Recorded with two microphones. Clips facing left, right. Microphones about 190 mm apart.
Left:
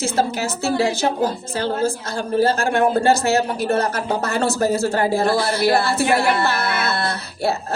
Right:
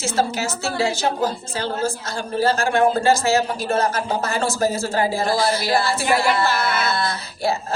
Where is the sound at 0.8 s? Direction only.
55° left (ahead or behind).